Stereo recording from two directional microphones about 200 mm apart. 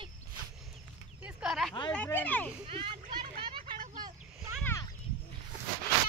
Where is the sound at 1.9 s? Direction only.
10° left (ahead or behind).